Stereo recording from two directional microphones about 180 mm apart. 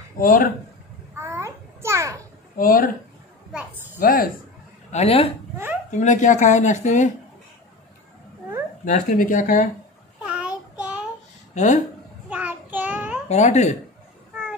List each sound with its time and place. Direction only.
0.2 s speech: 50° left (ahead or behind)
1.1 s babbling: 15° right (ahead or behind)
2.5 s speech: 50° left (ahead or behind)
3.5 s a woman's voice: 10° right (ahead or behind)
4.0 s speech: 55° left (ahead or behind)
4.9 s speech: 35° left (ahead or behind)
8.8 s speech: 45° left (ahead or behind)
10.2 s child singing: 5° right (ahead or behind)
11.5 s speech: 40° left (ahead or behind)
12.3 s child singing: 10° right (ahead or behind)
13.3 s speech: 40° left (ahead or behind)